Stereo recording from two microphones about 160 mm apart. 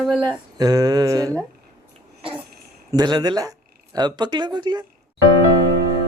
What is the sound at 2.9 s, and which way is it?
Speech, 25° right (ahead or behind).